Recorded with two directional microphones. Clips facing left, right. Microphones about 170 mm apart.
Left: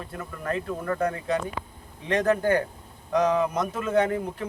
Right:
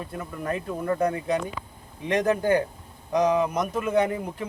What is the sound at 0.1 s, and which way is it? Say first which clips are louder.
Speech: left 1 dB; 15° right (ahead or behind).